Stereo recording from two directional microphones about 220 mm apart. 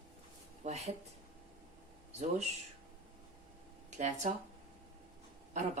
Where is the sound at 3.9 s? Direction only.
35° right (ahead or behind).